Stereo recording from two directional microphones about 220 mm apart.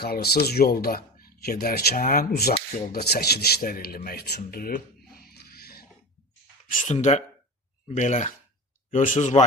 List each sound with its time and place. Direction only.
0.0 s speech: 45° left (ahead or behind)